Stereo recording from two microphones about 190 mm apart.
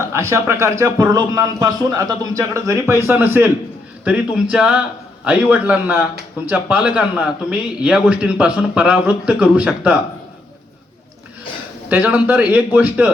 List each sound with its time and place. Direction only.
0.0 s a man's voice: 15° right (ahead or behind)
11.9 s a man's voice: 10° right (ahead or behind)